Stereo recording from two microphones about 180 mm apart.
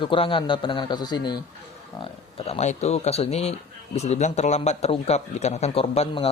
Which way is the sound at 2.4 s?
35° left (ahead or behind).